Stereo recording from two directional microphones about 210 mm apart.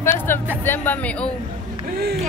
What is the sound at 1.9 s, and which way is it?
Run, 50° right (ahead or behind).